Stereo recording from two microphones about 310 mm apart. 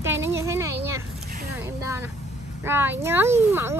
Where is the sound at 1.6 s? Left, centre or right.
Centre.